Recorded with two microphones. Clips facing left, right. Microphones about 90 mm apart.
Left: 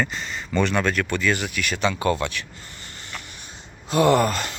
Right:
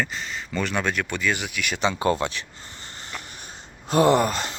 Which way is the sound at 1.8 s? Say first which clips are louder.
Even; 25° right (ahead or behind).